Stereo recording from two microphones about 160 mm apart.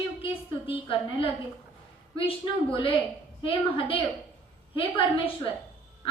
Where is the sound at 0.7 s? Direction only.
35° left (ahead or behind).